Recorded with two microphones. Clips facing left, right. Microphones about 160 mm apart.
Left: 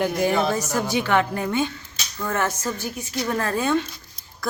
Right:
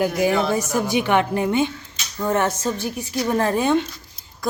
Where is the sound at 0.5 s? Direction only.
15° right (ahead or behind).